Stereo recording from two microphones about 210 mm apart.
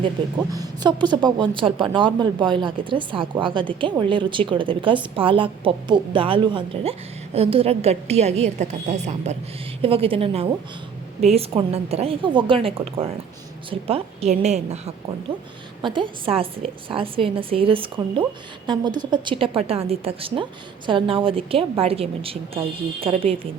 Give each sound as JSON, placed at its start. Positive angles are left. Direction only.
{"t": 0.0, "sound": "a woman's voice", "side_deg": -20}